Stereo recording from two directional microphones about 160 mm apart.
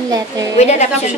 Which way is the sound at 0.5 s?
45° left (ahead or behind).